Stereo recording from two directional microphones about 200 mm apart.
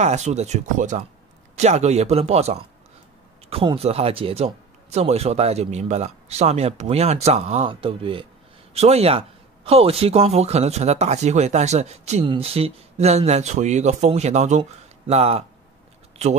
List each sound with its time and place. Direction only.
0.0 s speech: 35° right (ahead or behind)